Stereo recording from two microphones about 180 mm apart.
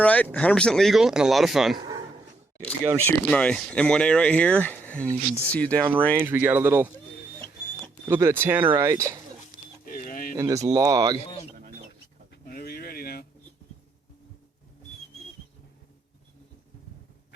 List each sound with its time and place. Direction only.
0.0 s speech: 10° left (ahead or behind)
3.0 s speech: 5° left (ahead or behind)
6.1 s speech: 15° right (ahead or behind)
8.0 s speech: 15° right (ahead or behind)
9.8 s a sound: 50° left (ahead or behind)
10.3 s speech: 15° right (ahead or behind)
11.2 s bird: 30° left (ahead or behind)
11.5 s a sound: 50° right (ahead or behind)
12.3 s bird: 55° left (ahead or behind)